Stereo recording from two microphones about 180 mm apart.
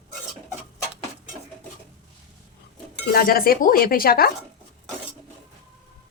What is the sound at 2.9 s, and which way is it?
Speech, 55° left (ahead or behind).